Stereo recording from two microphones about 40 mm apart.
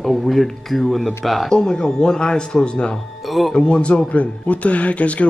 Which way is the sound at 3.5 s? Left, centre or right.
Left.